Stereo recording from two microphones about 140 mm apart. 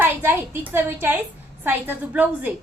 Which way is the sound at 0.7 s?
15° right (ahead or behind).